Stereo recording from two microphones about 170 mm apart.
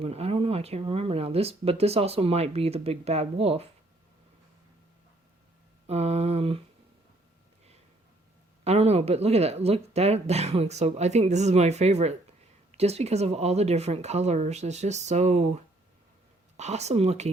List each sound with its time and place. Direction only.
0.0 s speech: 35° right (ahead or behind)
5.9 s speech: 40° right (ahead or behind)
8.6 s speech: 40° right (ahead or behind)